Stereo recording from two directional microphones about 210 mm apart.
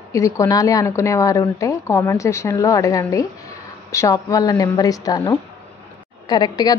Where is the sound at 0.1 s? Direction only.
15° left (ahead or behind).